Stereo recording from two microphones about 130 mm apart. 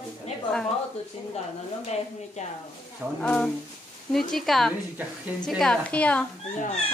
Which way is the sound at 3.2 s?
5° left (ahead or behind).